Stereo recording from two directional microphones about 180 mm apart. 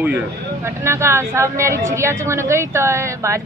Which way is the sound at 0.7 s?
15° right (ahead or behind).